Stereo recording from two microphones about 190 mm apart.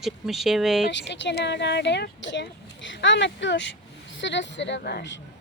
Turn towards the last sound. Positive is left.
turn(degrees=65)  # may be behind; listen again after turning